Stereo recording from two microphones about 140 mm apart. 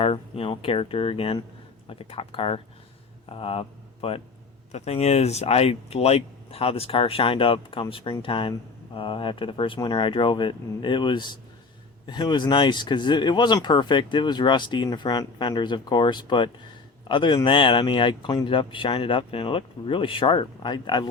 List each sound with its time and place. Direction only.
0.0 s speech: 45° left (ahead or behind)